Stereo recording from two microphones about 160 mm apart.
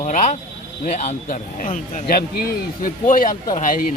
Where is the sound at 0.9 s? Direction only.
45° left (ahead or behind).